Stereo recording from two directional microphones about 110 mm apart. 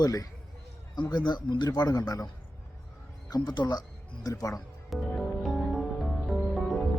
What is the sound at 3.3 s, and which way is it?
Speech, 40° left (ahead or behind).